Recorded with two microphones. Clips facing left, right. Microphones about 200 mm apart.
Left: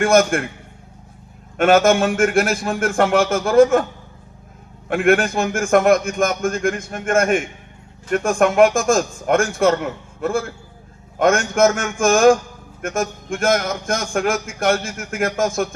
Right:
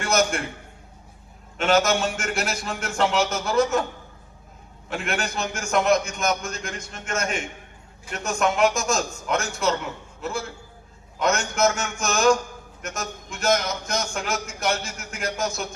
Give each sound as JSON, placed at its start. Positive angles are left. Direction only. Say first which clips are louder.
{"t": 0.0, "sound": "a man's voice", "louder": "left 8 dB", "side_deg": 50}
{"t": 1.5, "sound": "a man's voice", "louder": "left 7 dB", "side_deg": 50}
{"t": 4.9, "sound": "a man's voice", "louder": "left 12 dB", "side_deg": 55}